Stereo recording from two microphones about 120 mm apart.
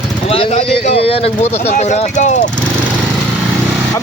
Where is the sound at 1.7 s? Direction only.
70° left (ahead or behind); by 2.4 s 90° left.